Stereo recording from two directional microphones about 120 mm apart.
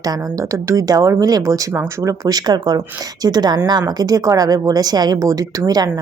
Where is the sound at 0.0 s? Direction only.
30° right (ahead or behind).